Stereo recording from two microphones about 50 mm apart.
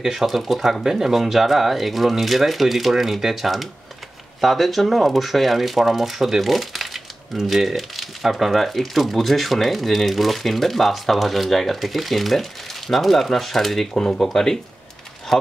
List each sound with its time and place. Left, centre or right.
0.0 s speech: centre